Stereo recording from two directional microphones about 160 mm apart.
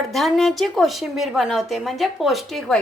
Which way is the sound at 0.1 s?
Centre (ahead or behind).